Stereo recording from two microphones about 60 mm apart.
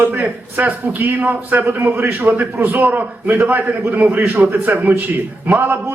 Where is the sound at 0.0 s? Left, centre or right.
Right.